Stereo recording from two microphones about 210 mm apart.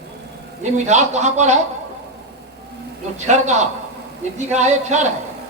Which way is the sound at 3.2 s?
35° right (ahead or behind).